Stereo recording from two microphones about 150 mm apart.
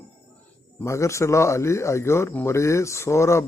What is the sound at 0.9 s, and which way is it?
Speech, 20° left (ahead or behind).